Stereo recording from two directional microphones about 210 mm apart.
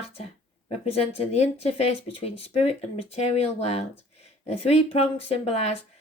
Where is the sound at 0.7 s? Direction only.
30° left (ahead or behind).